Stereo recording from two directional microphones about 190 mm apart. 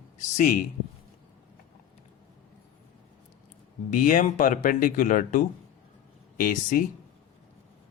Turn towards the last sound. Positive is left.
turn(degrees=45)  # may be behind; listen again after turning